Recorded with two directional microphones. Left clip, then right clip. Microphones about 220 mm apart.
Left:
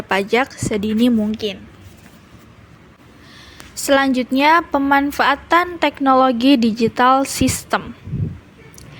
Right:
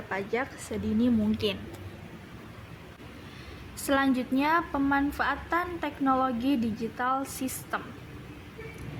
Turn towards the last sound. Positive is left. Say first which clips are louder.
# left 15 dB
turn(degrees=35)  # may be behind; listen again after turning